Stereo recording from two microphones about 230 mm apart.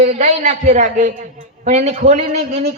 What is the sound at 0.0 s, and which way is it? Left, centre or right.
A woman's voice, right.